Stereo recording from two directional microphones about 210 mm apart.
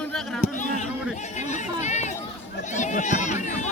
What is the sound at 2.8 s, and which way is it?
Speech, 35° left (ahead or behind).